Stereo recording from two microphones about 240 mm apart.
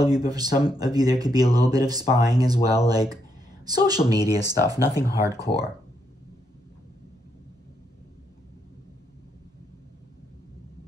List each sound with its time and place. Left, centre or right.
0.0 s speech: centre